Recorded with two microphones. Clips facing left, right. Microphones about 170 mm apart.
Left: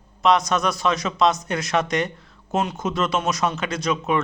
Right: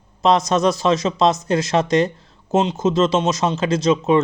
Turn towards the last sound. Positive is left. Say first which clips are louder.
# right 7 dB
turn(degrees=-25)  # may be behind; listen again after turning